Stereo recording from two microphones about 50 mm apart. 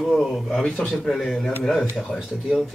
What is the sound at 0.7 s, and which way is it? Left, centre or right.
A man's voice, centre.